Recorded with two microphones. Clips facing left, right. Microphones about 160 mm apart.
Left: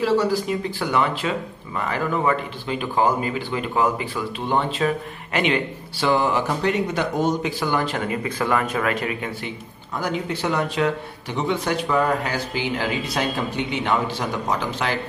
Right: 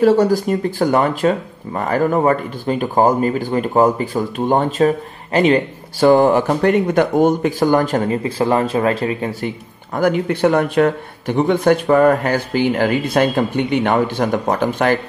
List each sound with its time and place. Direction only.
0.0 s speech: 45° right (ahead or behind)
8.2 s speech: 30° right (ahead or behind)
9.9 s speech: 55° right (ahead or behind)